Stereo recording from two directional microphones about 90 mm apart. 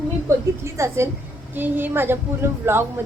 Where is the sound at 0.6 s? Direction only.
30° right (ahead or behind).